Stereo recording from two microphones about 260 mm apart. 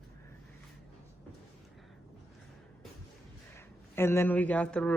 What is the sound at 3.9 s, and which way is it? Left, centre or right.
Speech, centre.